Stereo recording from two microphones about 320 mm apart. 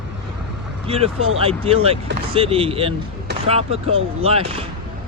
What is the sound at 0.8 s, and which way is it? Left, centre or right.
Speech, centre.